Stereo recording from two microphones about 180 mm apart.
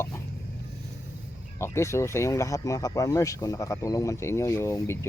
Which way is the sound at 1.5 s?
15° left (ahead or behind).